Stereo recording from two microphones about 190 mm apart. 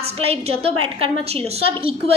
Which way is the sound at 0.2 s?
30° right (ahead or behind).